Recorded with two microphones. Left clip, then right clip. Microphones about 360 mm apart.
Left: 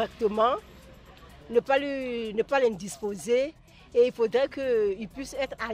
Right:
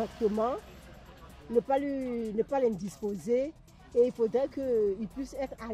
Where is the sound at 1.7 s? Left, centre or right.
Left.